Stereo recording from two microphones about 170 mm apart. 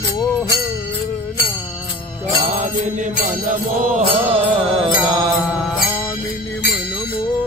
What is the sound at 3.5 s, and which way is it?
Mantra, 45° right (ahead or behind).